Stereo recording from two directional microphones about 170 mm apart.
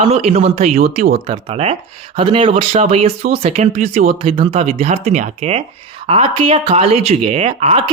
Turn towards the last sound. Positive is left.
turn(degrees=-35)  # may be behind; listen again after turning